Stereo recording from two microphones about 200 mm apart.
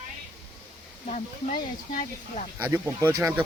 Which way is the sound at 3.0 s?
15° right (ahead or behind).